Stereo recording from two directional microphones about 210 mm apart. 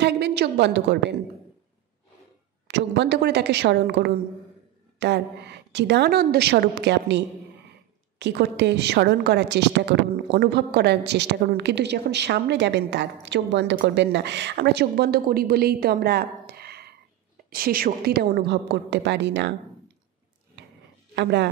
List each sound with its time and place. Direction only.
0.0 s a woman's voice: 55° right (ahead or behind)
2.7 s a woman's voice: 55° right (ahead or behind)
21.1 s speech: 55° right (ahead or behind)